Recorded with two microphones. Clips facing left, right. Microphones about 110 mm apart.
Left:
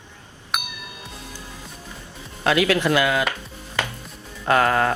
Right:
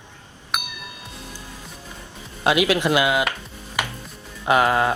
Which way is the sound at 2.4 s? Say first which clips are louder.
Even; 20° right (ahead or behind).